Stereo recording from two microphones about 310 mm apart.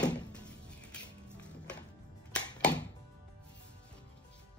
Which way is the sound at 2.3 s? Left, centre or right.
Centre.